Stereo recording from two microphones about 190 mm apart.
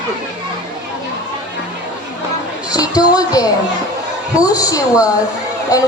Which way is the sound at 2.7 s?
20° left (ahead or behind).